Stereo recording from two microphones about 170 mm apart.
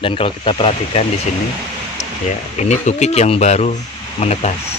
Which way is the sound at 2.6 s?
40° left (ahead or behind).